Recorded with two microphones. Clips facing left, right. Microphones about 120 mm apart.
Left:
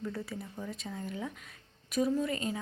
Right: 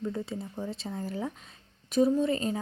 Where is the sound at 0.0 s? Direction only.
20° right (ahead or behind).